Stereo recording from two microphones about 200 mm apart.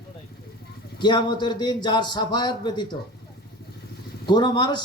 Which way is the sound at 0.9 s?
20° left (ahead or behind).